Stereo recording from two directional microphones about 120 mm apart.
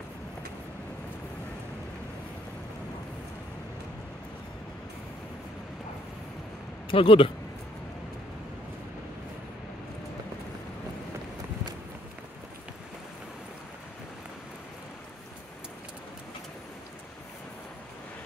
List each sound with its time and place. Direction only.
6.9 s speech: 50° left (ahead or behind)